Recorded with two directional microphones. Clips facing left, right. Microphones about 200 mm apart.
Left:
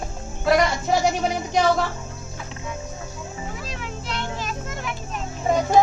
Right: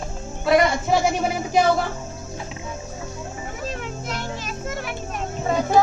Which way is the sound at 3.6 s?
45° right (ahead or behind).